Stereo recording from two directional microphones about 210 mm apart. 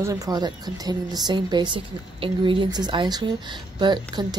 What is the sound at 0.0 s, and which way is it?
Speech, 15° right (ahead or behind).